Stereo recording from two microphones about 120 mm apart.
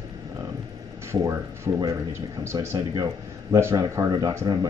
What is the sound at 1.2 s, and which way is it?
Speech, 25° right (ahead or behind).